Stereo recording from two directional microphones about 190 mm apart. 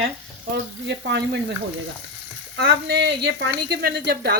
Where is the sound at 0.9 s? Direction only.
65° right (ahead or behind).